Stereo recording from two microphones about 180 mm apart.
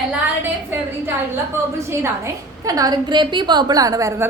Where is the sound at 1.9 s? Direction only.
15° right (ahead or behind).